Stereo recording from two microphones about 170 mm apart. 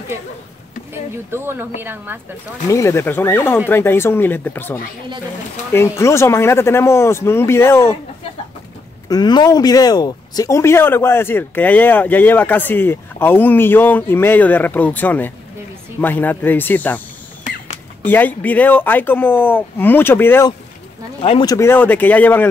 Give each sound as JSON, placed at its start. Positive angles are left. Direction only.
{"t": 1.3, "sound": "a woman's voice", "side_deg": -15}
{"t": 2.7, "sound": "speech", "side_deg": 15}
{"t": 9.1, "sound": "speech", "side_deg": 25}
{"t": 18.0, "sound": "speech", "side_deg": 10}
{"t": 21.2, "sound": "speech", "side_deg": 35}
{"t": 21.5, "sound": "speech", "side_deg": 15}